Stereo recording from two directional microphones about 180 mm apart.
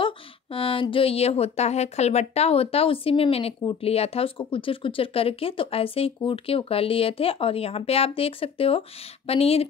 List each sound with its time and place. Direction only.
0.0 s speech: 30° left (ahead or behind)